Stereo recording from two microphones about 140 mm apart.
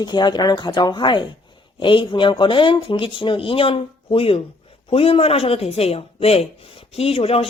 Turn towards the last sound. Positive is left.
turn(degrees=45)  # may be behind; listen again after turning